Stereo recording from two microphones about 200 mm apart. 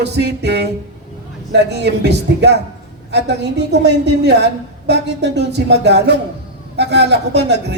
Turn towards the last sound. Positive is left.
turn(degrees=-55)  # may be behind; listen again after turning